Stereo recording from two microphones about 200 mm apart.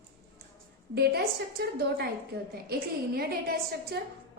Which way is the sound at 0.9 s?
50° right (ahead or behind).